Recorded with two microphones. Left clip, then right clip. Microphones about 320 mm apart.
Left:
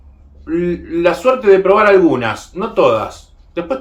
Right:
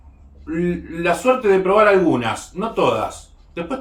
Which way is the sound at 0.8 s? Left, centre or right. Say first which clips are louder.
Left 4 dB; centre.